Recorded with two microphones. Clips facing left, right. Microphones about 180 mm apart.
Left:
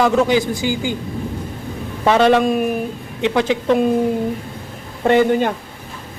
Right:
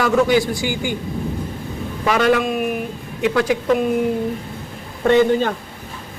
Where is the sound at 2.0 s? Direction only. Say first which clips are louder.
Left 4 dB; 25° left (ahead or behind).